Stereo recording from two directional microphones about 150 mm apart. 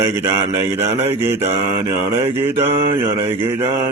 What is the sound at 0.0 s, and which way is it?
Mantra, 15° right (ahead or behind).